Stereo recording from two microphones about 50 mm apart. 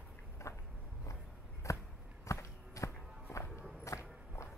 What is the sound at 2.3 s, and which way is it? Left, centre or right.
Walk, left.